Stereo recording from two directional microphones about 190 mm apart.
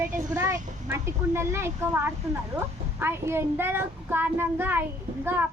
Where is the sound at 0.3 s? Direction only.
15° right (ahead or behind).